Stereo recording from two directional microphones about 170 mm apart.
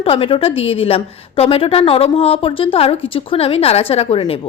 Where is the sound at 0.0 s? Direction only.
35° left (ahead or behind).